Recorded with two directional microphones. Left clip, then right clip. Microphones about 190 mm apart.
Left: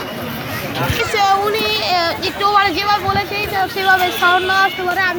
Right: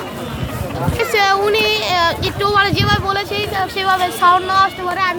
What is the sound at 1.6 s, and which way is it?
Speech, 35° right (ahead or behind).